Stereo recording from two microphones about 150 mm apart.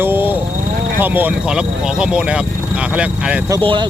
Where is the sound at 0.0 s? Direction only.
15° right (ahead or behind).